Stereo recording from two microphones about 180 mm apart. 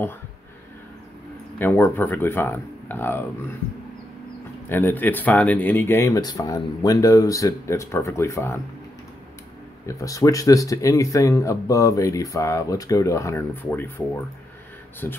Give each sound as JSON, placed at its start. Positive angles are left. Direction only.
{"t": 1.6, "sound": "speech", "side_deg": 10}
{"t": 4.6, "sound": "speech", "side_deg": 10}
{"t": 9.8, "sound": "speech", "side_deg": 20}